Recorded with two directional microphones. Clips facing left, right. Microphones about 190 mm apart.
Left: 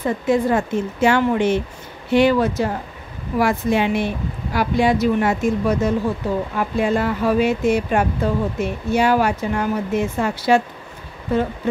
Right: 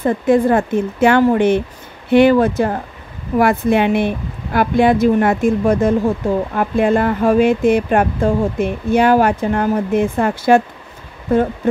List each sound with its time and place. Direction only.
0.0 s speech: 55° right (ahead or behind)